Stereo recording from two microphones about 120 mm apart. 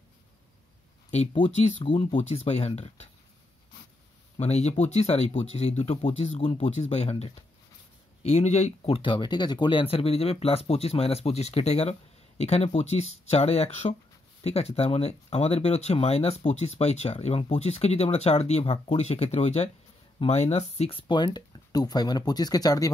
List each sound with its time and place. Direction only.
1.9 s speech: 45° left (ahead or behind)
2.1 s speech: 60° left (ahead or behind)
4.4 s speech: 65° left (ahead or behind)
21.1 s speech: 35° left (ahead or behind)